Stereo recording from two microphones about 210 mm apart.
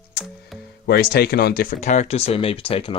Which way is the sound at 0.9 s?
45° left (ahead or behind).